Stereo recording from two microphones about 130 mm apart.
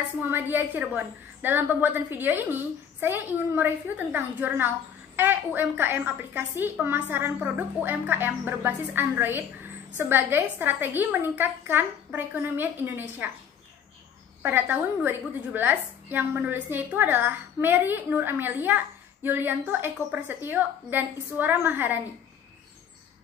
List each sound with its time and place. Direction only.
0.3 s a woman's voice: 15° right (ahead or behind)
14.4 s a woman's voice: 15° right (ahead or behind)